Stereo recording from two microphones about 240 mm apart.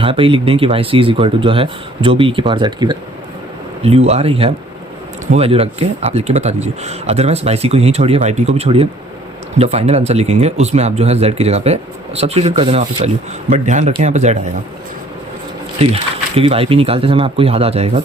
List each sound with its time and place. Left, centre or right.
0.0 s speech: right
15.8 s speech: right